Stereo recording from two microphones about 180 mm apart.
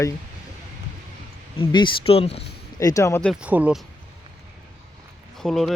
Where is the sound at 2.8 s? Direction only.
20° left (ahead or behind).